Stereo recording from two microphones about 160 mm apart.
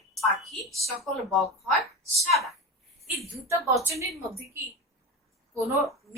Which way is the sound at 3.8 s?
20° right (ahead or behind).